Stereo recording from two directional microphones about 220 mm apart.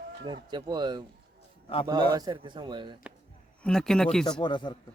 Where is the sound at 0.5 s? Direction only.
20° right (ahead or behind).